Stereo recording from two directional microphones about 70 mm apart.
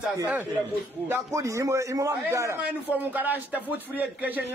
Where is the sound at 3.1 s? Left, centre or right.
Right.